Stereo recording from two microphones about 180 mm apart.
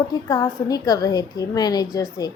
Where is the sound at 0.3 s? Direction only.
20° left (ahead or behind).